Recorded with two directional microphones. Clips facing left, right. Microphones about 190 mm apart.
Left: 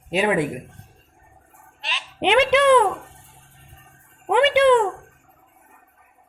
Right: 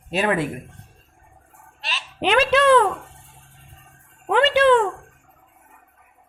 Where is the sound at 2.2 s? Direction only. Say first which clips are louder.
Left 1 dB; 20° left (ahead or behind).